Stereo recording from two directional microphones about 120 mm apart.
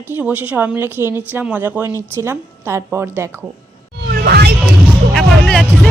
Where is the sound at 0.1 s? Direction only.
15° right (ahead or behind).